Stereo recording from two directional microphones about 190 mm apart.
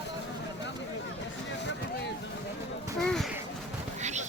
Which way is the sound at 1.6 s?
65° left (ahead or behind).